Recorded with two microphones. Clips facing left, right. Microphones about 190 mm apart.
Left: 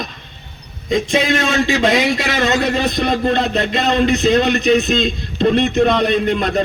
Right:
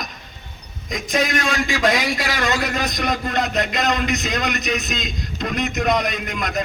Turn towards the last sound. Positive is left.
turn(degrees=30)  # may be behind; listen again after turning